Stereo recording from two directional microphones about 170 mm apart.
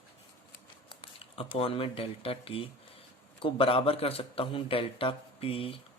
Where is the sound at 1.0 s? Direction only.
30° left (ahead or behind).